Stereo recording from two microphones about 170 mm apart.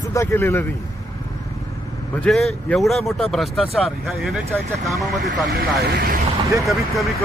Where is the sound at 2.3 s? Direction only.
Centre (ahead or behind).